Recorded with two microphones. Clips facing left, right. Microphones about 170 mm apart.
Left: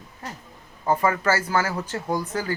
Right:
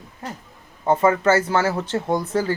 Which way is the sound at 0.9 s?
25° right (ahead or behind).